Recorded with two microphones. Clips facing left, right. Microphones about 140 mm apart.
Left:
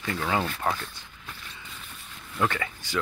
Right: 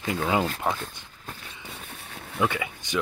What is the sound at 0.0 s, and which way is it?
Speech, 15° right (ahead or behind).